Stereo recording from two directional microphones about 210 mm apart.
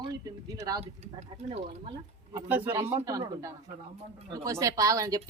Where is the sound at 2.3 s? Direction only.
10° right (ahead or behind).